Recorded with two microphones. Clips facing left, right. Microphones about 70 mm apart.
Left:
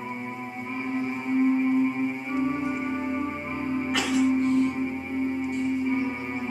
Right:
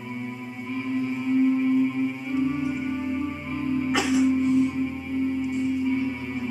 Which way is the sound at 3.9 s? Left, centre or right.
Centre.